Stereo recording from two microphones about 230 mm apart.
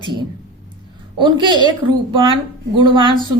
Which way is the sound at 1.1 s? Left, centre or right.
Centre.